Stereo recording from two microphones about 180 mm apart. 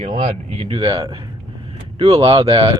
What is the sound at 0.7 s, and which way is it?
Speech, 20° right (ahead or behind).